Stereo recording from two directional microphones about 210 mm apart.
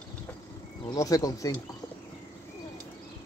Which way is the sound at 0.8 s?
15° left (ahead or behind).